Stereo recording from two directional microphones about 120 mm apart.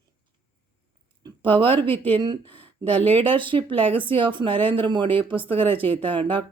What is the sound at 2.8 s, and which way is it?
Speech, 15° left (ahead or behind).